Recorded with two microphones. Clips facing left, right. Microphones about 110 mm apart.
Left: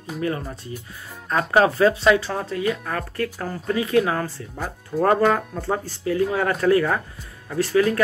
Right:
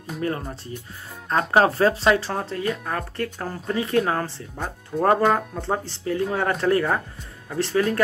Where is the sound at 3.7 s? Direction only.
35° right (ahead or behind).